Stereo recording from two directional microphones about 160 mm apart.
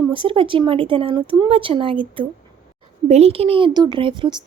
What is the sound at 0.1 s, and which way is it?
Speech, 30° right (ahead or behind).